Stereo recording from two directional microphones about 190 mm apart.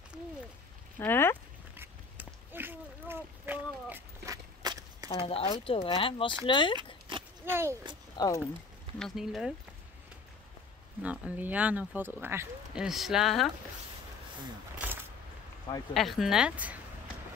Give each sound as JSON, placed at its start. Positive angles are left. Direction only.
{"t": 0.9, "sound": "speech", "side_deg": 10}
{"t": 1.8, "sound": "a sound", "side_deg": -10}
{"t": 5.1, "sound": "speech", "side_deg": 30}
{"t": 7.1, "sound": "a sound", "side_deg": -25}
{"t": 7.4, "sound": "speech", "side_deg": -15}
{"t": 8.2, "sound": "speech", "side_deg": 20}
{"t": 8.9, "sound": "speech", "side_deg": 0}
{"t": 11.0, "sound": "speech", "side_deg": -5}
{"t": 14.8, "sound": "a sound", "side_deg": -10}
{"t": 15.9, "sound": "speech", "side_deg": 0}